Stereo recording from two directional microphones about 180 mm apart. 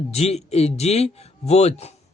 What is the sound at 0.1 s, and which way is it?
A man's voice, 35° left (ahead or behind).